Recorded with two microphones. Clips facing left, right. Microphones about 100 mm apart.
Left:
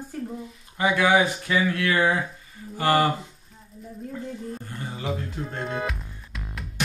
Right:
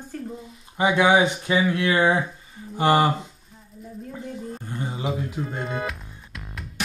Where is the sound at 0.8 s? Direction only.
20° right (ahead or behind).